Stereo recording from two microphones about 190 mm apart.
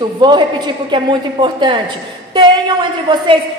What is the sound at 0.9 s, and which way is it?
Speech, 25° right (ahead or behind).